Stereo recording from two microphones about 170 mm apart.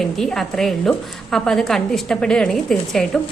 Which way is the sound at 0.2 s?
5° left (ahead or behind).